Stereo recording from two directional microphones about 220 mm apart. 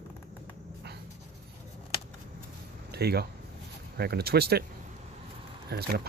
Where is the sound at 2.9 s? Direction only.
45° right (ahead or behind).